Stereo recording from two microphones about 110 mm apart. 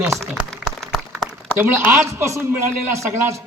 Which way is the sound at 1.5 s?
20° right (ahead or behind).